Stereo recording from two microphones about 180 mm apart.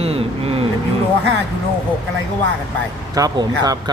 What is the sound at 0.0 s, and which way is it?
Vehicle, 35° right (ahead or behind).